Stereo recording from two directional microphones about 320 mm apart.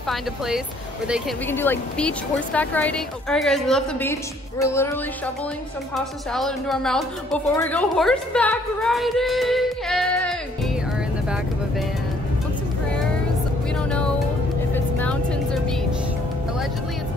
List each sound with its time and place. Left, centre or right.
1.0 s a woman's voice: centre
13.7 s music: centre
14.7 s vehicle: centre